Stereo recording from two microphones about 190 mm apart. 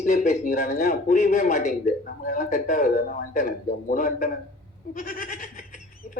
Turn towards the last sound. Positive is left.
turn(degrees=45)  # may be behind; listen again after turning